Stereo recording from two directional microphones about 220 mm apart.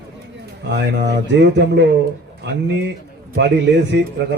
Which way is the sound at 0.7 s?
50° right (ahead or behind).